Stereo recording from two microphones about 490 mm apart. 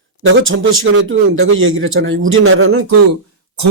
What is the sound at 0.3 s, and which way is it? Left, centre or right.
A man's voice, right.